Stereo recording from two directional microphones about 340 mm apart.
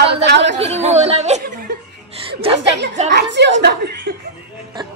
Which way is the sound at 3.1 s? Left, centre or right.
Right.